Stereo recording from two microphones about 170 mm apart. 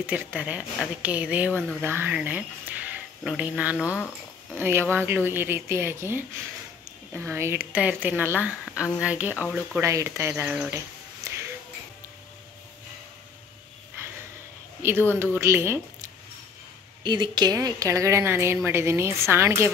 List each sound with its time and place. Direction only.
0.0 s speech: 10° right (ahead or behind)
11.2 s a sound: 20° right (ahead or behind)
14.8 s speech: 15° right (ahead or behind)
17.0 s speech: 25° right (ahead or behind)